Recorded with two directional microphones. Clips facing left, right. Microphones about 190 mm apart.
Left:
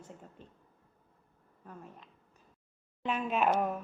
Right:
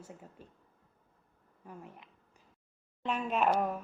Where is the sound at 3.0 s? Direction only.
Centre (ahead or behind).